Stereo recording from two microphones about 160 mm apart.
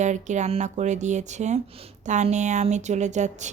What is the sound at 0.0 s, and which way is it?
Speech, 50° right (ahead or behind).